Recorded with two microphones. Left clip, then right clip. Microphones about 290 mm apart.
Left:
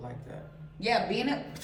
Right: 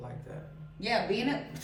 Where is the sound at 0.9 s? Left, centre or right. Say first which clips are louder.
Left 1 dB; centre.